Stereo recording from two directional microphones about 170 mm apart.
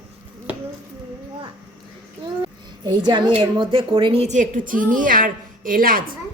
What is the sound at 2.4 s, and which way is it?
A woman's voice, 25° right (ahead or behind).